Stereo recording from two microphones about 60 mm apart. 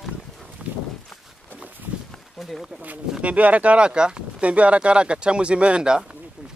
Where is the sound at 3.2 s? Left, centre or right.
Right.